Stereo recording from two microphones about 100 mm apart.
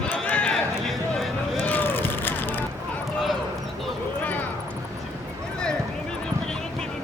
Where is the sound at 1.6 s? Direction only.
20° left (ahead or behind).